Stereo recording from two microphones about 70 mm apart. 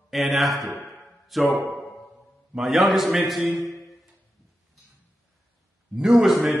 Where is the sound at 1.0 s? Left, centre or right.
Centre.